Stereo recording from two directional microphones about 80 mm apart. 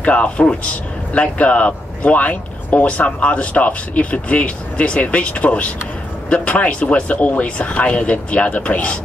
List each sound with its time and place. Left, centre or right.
0.0 s speech: centre